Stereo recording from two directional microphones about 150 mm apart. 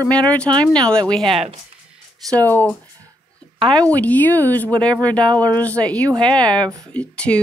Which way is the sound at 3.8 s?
10° left (ahead or behind).